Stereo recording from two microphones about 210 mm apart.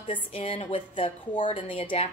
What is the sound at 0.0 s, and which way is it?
A woman's voice, 25° left (ahead or behind).